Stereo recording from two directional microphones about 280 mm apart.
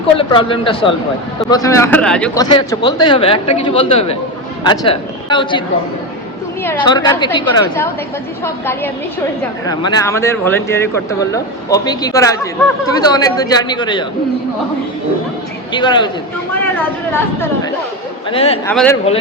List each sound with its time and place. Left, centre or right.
0.2 s a man's voice: centre
9.6 s speech: centre
15.7 s speech: centre
18.3 s a man's voice: left
18.6 s speech: centre